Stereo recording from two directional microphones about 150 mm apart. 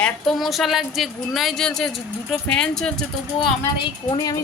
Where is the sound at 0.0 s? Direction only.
Centre (ahead or behind).